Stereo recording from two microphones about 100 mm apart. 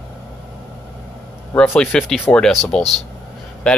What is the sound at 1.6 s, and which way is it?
Speech, 10° left (ahead or behind).